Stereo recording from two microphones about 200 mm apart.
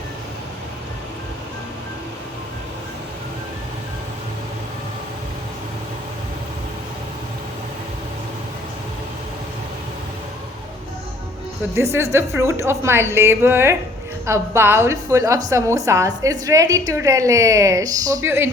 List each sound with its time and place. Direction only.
11.8 s a woman's voice: 15° right (ahead or behind)